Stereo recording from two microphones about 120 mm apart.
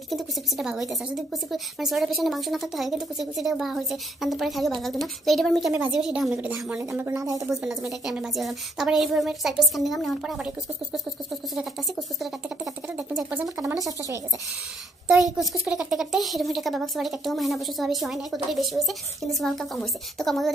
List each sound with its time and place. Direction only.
0.1 s a woman's voice: centre (ahead or behind); by 7.2 s 20° right (ahead or behind)
7.2 s a woman's voice: 30° right (ahead or behind)
7.5 s speech: 5° right (ahead or behind)
12.9 s a woman's voice: 15° right (ahead or behind)
15.3 s speech: 5° right (ahead or behind)